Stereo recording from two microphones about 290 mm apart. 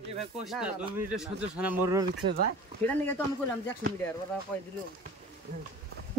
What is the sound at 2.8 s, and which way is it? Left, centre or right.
Speech, centre.